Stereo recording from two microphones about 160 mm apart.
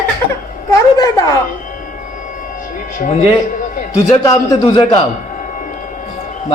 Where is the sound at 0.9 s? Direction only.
25° left (ahead or behind).